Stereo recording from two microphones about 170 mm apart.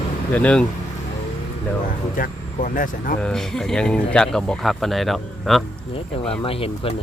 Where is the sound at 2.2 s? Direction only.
55° left (ahead or behind).